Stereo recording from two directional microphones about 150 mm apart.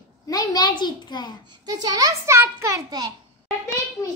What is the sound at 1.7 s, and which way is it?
A child's voice, 25° right (ahead or behind).